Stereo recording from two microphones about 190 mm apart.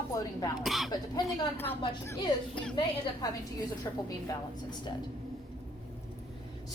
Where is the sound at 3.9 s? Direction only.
20° left (ahead or behind).